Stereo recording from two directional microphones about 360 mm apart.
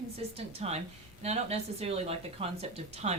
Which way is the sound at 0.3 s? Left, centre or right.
Centre.